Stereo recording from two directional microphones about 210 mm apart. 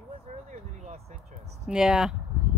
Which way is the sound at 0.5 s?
30° right (ahead or behind).